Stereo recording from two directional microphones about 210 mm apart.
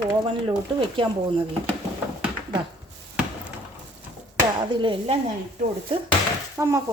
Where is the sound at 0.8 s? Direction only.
25° right (ahead or behind).